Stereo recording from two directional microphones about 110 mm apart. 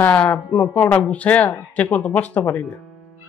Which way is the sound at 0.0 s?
10° left (ahead or behind).